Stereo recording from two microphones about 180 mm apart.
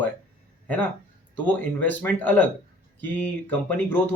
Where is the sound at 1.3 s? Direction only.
10° left (ahead or behind).